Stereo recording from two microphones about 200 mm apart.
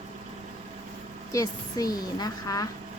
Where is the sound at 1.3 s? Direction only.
15° left (ahead or behind).